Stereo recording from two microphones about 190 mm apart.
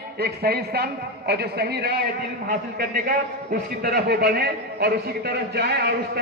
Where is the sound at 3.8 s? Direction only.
55° right (ahead or behind).